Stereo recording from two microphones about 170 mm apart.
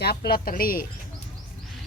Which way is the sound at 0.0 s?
70° left (ahead or behind).